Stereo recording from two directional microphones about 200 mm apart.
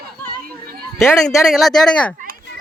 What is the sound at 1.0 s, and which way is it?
Speech, 15° left (ahead or behind).